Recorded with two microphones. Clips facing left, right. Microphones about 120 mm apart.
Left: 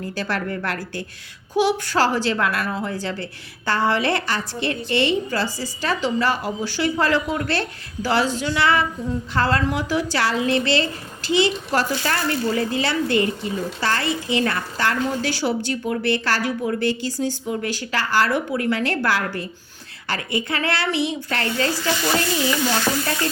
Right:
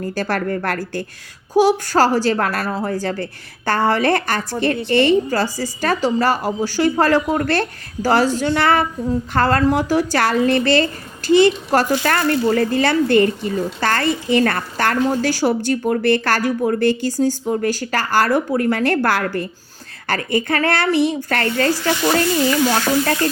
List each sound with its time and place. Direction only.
0.1 s a woman's voice: 45° right (ahead or behind)